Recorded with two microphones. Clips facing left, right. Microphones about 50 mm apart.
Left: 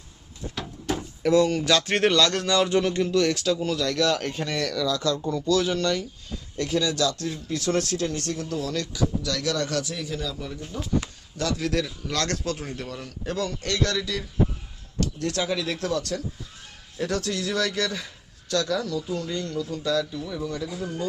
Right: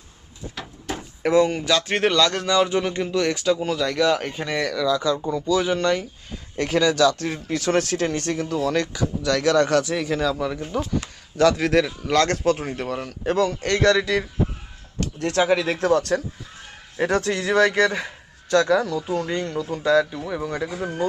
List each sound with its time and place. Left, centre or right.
1.2 s speech: right
1.6 s speech: centre; by 6.1 s right
6.6 s speech: right
7.3 s speech: right
11.3 s speech: right